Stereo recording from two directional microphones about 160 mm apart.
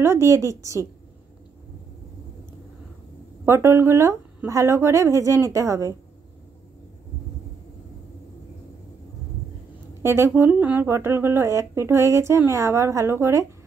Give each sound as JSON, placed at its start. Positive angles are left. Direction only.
{"t": 0.0, "sound": "speech", "side_deg": -15}
{"t": 3.4, "sound": "speech", "side_deg": -15}
{"t": 10.0, "sound": "speech", "side_deg": -15}